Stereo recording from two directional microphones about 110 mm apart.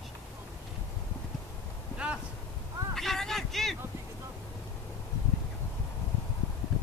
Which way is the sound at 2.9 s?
Centre (ahead or behind).